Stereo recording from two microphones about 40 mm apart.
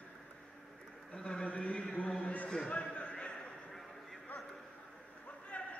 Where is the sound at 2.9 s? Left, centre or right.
Left.